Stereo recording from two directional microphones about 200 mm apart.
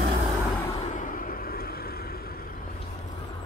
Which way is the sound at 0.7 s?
35° left (ahead or behind).